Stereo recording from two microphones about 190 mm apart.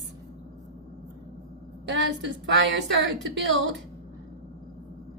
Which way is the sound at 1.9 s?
75° right (ahead or behind).